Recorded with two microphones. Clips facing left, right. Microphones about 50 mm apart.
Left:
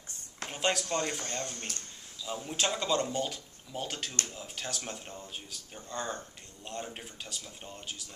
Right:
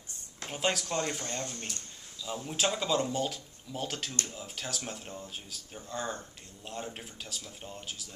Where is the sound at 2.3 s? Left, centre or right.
Centre.